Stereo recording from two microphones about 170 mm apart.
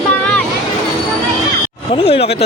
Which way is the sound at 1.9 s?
35° left (ahead or behind).